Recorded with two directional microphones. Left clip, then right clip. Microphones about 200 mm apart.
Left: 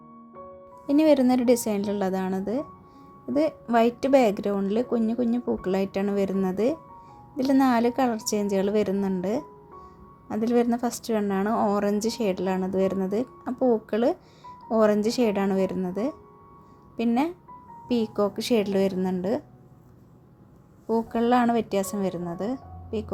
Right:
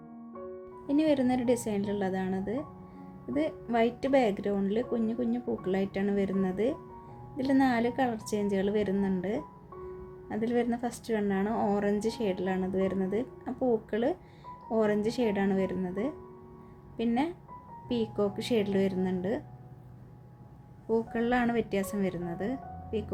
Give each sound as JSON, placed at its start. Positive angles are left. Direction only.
{"t": 0.9, "sound": "speech", "side_deg": 30}
{"t": 20.8, "sound": "speech", "side_deg": 25}